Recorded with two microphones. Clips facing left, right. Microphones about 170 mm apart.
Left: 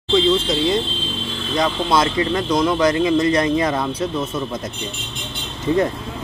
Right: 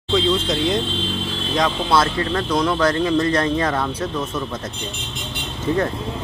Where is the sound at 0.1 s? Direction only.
Centre (ahead or behind).